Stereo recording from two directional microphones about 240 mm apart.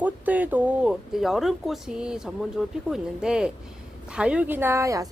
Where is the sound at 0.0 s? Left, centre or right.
Centre.